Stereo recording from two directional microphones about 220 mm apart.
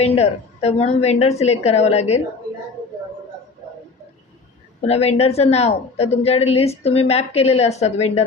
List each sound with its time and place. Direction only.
0.0 s a woman's voice: 30° left (ahead or behind)
4.8 s a woman's voice: 30° left (ahead or behind)